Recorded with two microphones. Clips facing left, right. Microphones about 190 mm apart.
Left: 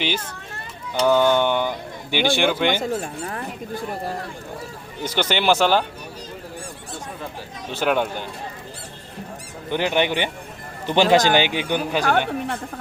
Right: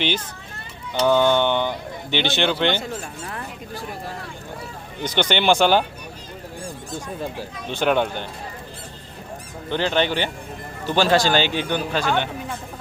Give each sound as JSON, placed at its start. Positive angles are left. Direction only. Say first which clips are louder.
{"t": 1.0, "sound": "speech", "louder": "even", "side_deg": 5}
{"t": 2.7, "sound": "speech", "louder": "left 4 dB", "side_deg": 35}
{"t": 5.0, "sound": "speech", "louder": "right 1 dB", "side_deg": 5}
{"t": 7.7, "sound": "speech", "louder": "right 1 dB", "side_deg": 5}
{"t": 9.6, "sound": "speech", "louder": "even", "side_deg": 15}